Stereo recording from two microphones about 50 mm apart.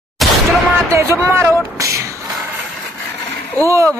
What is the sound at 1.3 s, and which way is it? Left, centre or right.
Speech, right.